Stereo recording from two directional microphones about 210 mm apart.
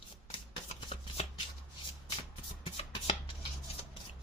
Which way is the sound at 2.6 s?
25° left (ahead or behind).